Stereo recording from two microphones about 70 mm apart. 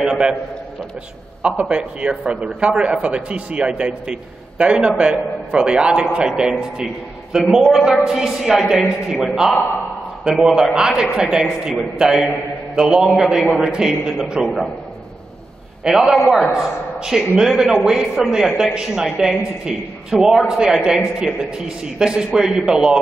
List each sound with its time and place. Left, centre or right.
0.0 s a man's voice: centre
1.4 s a man's voice: centre
15.8 s a man's voice: centre